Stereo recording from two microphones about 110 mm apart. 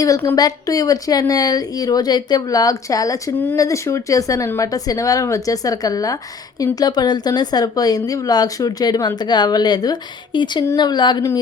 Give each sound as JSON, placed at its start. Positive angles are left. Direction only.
{"t": 0.3, "sound": "speech", "side_deg": 35}
{"t": 3.3, "sound": "speech", "side_deg": 15}
{"t": 3.6, "sound": "speech", "side_deg": 30}